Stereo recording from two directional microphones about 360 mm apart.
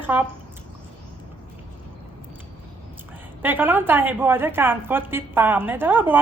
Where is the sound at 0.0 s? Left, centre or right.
Centre.